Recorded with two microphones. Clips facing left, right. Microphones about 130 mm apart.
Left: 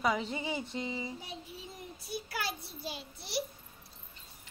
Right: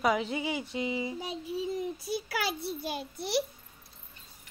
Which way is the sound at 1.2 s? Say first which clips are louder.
Right 11 dB; 90° right.